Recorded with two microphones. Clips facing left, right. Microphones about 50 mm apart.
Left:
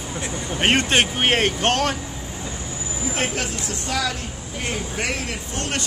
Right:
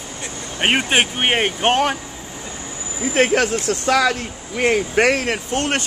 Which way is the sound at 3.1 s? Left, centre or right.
Right.